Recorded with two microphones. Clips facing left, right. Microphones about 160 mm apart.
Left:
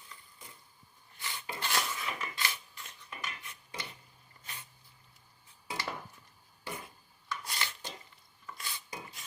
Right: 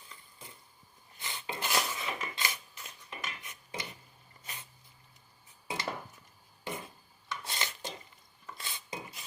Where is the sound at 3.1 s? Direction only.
20° right (ahead or behind).